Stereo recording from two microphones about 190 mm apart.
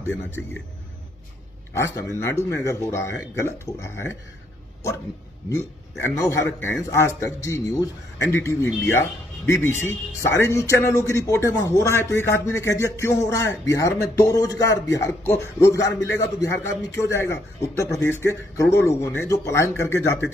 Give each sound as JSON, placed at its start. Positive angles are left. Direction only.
{"t": 1.8, "sound": "speech", "side_deg": 15}
{"t": 5.5, "sound": "speech", "side_deg": 15}